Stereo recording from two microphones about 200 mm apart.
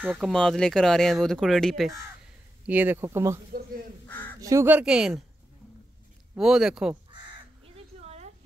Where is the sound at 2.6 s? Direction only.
10° right (ahead or behind).